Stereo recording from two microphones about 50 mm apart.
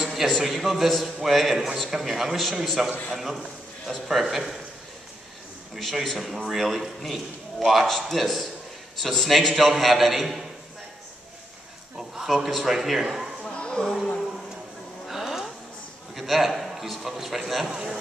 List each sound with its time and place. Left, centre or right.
0.1 s a man's voice: centre
5.8 s a man's voice: centre
12.0 s a man's voice: centre
13.4 s a sound: centre
15.0 s a sound: centre
16.2 s a man's voice: centre